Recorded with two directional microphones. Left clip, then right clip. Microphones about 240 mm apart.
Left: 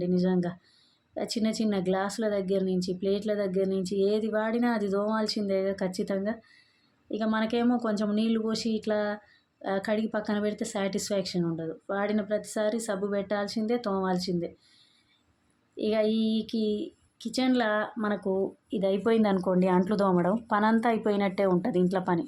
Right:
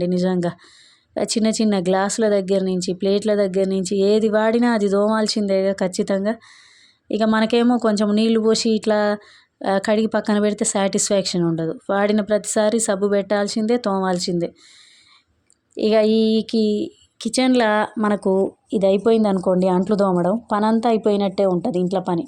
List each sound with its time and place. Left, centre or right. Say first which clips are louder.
0.0 s speech: right 8 dB; right
15.7 s a woman's voice: right 10 dB; right